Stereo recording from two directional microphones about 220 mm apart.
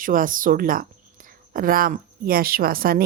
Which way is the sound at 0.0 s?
40° right (ahead or behind).